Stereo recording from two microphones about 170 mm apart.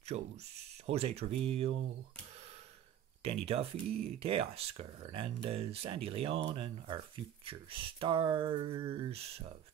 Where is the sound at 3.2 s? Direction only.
35° right (ahead or behind).